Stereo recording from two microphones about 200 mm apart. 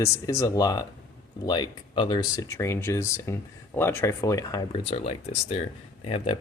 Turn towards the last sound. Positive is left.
turn(degrees=25)  # may be behind; listen again after turning